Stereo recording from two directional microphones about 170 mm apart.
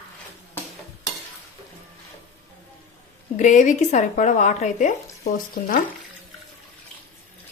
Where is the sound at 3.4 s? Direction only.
45° left (ahead or behind).